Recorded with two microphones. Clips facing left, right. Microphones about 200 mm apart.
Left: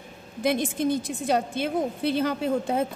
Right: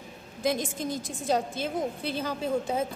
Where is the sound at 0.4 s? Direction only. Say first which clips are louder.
Left 4 dB; 60° left (ahead or behind).